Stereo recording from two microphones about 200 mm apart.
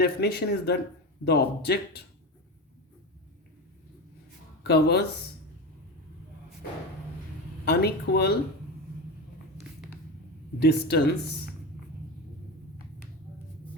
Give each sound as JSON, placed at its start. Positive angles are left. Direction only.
{"t": 0.0, "sound": "speech", "side_deg": 55}
{"t": 4.6, "sound": "speech", "side_deg": 55}
{"t": 7.6, "sound": "speech", "side_deg": 55}
{"t": 10.6, "sound": "speech", "side_deg": 55}